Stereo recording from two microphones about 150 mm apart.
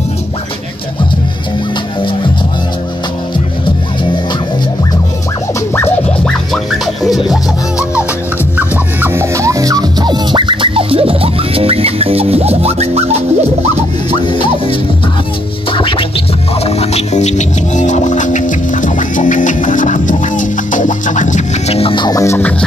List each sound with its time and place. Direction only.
6.2 s music: centre (ahead or behind)
8.5 s music: 15° right (ahead or behind); by 13.7 s 45° right (ahead or behind)
14.2 s music: 35° left (ahead or behind)